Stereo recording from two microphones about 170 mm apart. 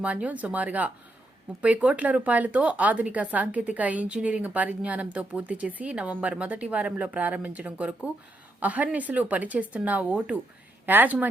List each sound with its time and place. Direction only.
0.0 s a woman's voice: 10° right (ahead or behind)